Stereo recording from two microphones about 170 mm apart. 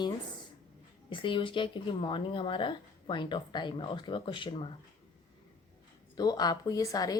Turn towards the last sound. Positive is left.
turn(degrees=20)  # may be behind; listen again after turning